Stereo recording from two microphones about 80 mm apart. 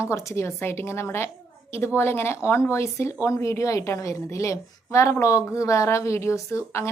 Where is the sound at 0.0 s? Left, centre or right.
Left.